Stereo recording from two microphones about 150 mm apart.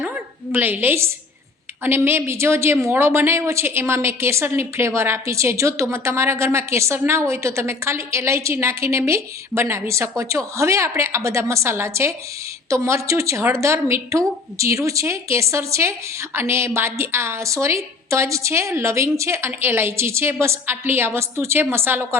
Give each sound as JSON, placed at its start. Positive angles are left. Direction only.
{"t": 0.5, "sound": "a woman's voice", "side_deg": -15}